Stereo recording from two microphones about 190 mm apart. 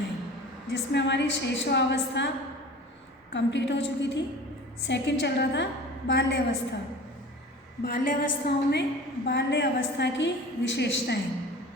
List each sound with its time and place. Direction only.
0.7 s a woman's voice: 70° left (ahead or behind)
3.3 s a woman's voice: 70° left (ahead or behind)
7.9 s a woman's voice: 45° left (ahead or behind)
9.2 s a woman's voice: 65° left (ahead or behind)